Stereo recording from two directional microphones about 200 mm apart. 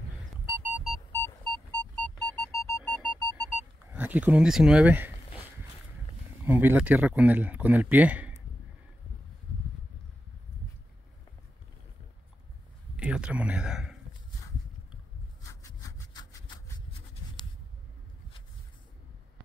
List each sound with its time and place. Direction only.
0.7 s music: 5° right (ahead or behind)
1.1 s music: 10° left (ahead or behind)
3.0 s sonar: 5° right (ahead or behind)
6.4 s speech: 10° right (ahead or behind)
12.9 s a sound: 5° right (ahead or behind)
15.4 s sawing: 15° left (ahead or behind)